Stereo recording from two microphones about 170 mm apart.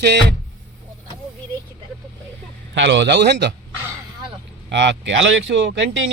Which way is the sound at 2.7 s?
90° right.